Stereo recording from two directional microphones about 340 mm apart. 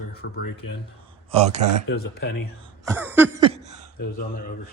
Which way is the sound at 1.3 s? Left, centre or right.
Centre.